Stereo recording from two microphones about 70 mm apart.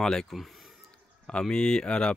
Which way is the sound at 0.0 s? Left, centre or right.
Centre.